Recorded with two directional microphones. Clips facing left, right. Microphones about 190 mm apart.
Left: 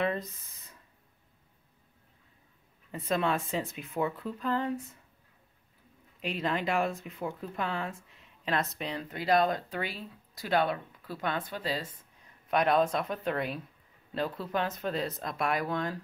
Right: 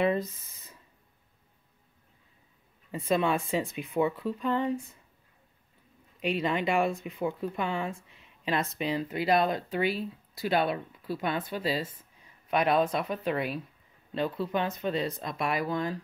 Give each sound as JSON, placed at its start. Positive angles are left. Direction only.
{"t": 0.0, "sound": "a sound", "side_deg": -5}
{"t": 3.1, "sound": "speech", "side_deg": -5}
{"t": 6.2, "sound": "speech", "side_deg": 0}